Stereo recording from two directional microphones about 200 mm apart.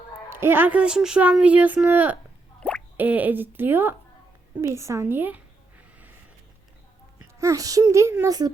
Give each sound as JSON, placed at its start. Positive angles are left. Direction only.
{"t": 0.3, "sound": "speech", "side_deg": -10}
{"t": 2.6, "sound": "drip", "side_deg": 5}
{"t": 3.0, "sound": "speech", "side_deg": -10}
{"t": 4.6, "sound": "a sound", "side_deg": -15}
{"t": 7.3, "sound": "speech", "side_deg": -15}